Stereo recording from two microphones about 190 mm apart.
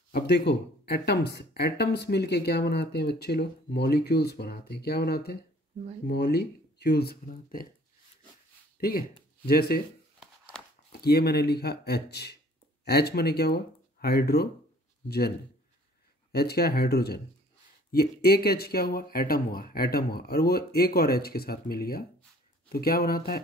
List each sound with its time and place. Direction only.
0.1 s speech: 60° left (ahead or behind)
8.7 s a sound: 50° left (ahead or behind)
9.5 s speech: 55° left (ahead or behind)
10.9 s speech: 55° left (ahead or behind)